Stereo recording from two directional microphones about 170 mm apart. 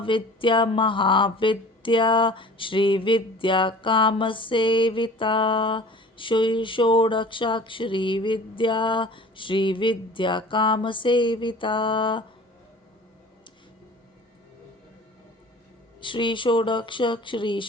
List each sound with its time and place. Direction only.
0.0 s speech: 30° left (ahead or behind)
16.0 s speech: 30° left (ahead or behind)